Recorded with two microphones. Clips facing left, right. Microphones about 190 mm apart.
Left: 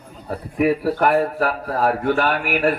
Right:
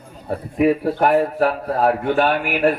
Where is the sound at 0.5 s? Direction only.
20° right (ahead or behind).